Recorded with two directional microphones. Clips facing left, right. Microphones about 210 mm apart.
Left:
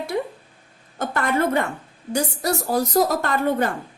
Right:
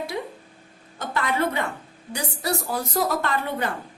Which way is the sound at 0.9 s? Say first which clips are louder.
Left 3 dB; 50° left (ahead or behind).